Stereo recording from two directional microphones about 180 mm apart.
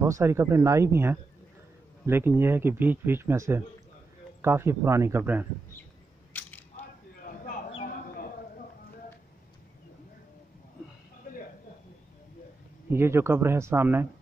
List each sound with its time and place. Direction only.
0.0 s speech: 15° right (ahead or behind)
6.4 s a sound: 10° left (ahead or behind)
12.9 s speech: 15° right (ahead or behind)